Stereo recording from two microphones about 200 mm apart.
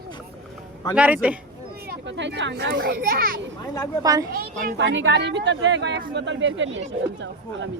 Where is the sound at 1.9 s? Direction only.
65° right (ahead or behind).